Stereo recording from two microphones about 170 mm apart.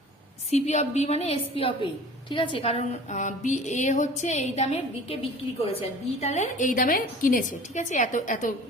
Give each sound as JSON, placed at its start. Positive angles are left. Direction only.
{"t": 0.5, "sound": "a woman's voice", "side_deg": 40}